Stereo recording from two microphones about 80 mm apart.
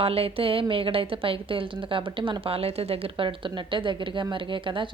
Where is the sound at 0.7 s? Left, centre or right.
Right.